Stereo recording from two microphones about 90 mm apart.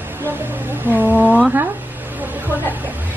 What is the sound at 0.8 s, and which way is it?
Speech, 20° right (ahead or behind).